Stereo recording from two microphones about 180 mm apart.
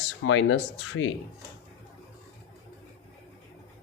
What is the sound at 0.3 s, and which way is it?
Speech, 90° left.